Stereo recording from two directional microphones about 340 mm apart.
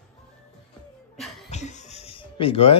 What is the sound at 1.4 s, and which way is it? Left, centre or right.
Music, centre.